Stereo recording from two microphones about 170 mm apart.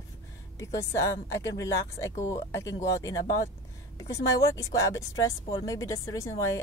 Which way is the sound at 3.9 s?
20° left (ahead or behind).